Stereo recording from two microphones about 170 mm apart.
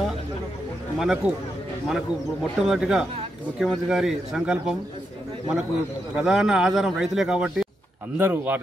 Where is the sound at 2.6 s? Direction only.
5° right (ahead or behind).